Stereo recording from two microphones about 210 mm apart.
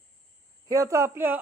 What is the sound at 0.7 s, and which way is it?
Speech, 15° right (ahead or behind).